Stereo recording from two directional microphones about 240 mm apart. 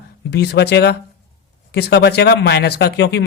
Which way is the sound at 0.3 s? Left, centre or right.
Left.